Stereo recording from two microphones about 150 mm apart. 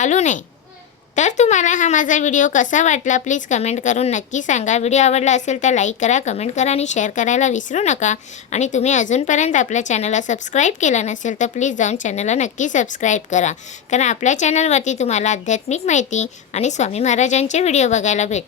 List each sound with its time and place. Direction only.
0.0 s a woman's voice: 50° left (ahead or behind)